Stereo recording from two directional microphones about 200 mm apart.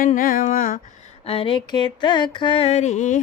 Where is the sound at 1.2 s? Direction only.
30° left (ahead or behind).